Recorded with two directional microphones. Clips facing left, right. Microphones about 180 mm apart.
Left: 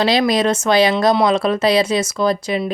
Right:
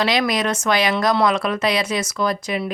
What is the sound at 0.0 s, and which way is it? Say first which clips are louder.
Speech: left 4 dB; 30° left (ahead or behind).